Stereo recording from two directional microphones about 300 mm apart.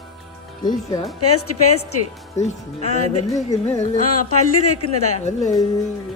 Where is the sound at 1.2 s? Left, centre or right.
Left.